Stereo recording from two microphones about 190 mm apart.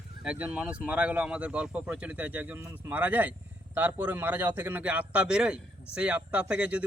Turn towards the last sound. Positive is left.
turn(degrees=-5)  # may be behind; listen again after turning